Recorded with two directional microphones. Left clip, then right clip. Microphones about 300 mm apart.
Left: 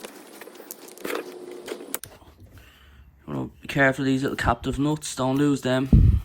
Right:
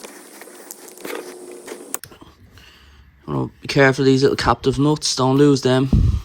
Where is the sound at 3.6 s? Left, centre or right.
Centre.